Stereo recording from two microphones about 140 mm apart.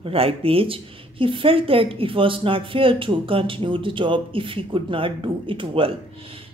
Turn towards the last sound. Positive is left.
turn(degrees=-40)  # may be behind; listen again after turning